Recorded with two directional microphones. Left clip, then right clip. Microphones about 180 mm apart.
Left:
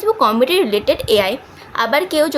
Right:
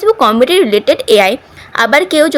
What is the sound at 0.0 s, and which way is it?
A woman's voice, 30° right (ahead or behind).